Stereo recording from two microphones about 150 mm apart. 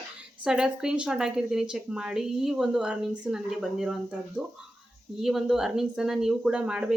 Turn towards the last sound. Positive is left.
turn(degrees=-5)  # may be behind; listen again after turning